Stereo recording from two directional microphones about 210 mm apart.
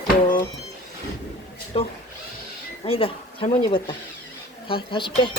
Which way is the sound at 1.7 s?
30° left (ahead or behind).